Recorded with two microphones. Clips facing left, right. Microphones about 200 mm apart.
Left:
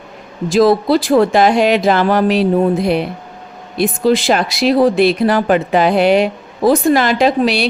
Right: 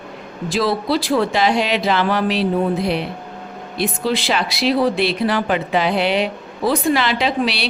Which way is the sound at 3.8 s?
45° left (ahead or behind).